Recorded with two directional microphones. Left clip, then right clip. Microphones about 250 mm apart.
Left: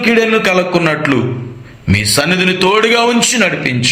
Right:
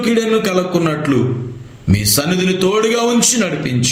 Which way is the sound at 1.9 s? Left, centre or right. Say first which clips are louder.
Left 5 dB; centre.